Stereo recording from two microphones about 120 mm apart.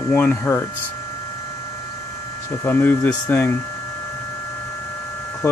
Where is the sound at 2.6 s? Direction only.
15° left (ahead or behind).